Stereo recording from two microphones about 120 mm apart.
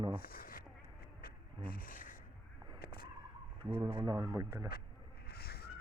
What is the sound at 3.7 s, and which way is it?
Speech, 20° right (ahead or behind).